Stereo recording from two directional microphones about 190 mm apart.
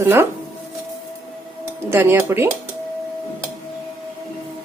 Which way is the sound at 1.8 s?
10° right (ahead or behind).